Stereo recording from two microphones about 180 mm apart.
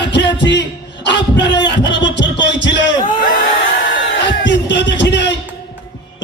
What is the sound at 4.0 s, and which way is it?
Music, 85° left.